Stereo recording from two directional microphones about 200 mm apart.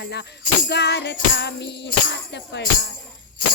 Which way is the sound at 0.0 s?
55° left (ahead or behind).